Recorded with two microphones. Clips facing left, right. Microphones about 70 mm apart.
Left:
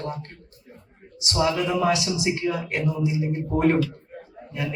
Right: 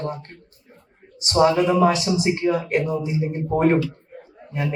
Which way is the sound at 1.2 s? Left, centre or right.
Right.